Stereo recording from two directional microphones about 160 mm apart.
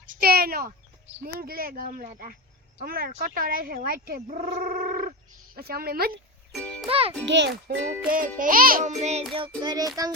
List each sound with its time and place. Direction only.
0.1 s a sound: 70° right (ahead or behind)
1.2 s a woman's voice: 65° right (ahead or behind)
4.4 s a sound: 45° right (ahead or behind)
5.5 s a woman's voice: 75° right (ahead or behind)
6.5 s music: 5° left (ahead or behind)
6.8 s a child's voice: 35° right (ahead or behind)
7.3 s a child's voice: 90° right
8.0 s speech: 60° right (ahead or behind); by 9.2 s 45° right (ahead or behind)
9.6 s a sound: 25° right (ahead or behind)